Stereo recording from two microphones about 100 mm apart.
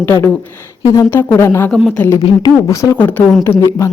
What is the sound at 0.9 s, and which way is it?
Speech, 30° left (ahead or behind).